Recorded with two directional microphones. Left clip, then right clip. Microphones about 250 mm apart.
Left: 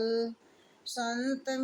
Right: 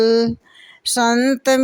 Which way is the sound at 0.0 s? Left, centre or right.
Right.